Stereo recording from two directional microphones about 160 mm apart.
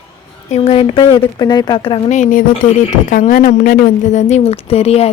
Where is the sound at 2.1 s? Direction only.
55° left (ahead or behind).